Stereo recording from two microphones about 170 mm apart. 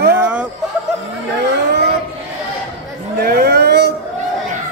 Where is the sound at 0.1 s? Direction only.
5° right (ahead or behind).